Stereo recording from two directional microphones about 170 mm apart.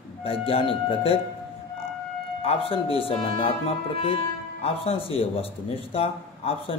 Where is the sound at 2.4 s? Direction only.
35° left (ahead or behind).